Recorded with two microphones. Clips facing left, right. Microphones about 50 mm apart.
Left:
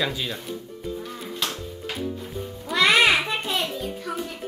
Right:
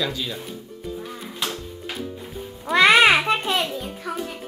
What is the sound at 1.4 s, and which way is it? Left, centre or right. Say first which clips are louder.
Music: right 2 dB; centre.